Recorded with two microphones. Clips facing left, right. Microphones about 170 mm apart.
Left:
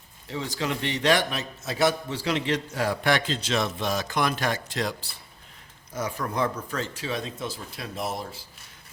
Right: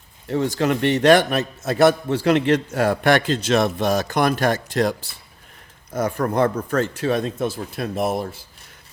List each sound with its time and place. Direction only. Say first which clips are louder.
0.3 s a man's voice: right 9 dB; 55° right (ahead or behind)